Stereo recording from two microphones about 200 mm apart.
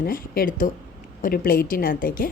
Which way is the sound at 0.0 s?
45° left (ahead or behind).